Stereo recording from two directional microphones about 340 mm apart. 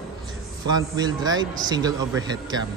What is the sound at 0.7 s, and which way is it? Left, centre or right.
A man's voice, centre.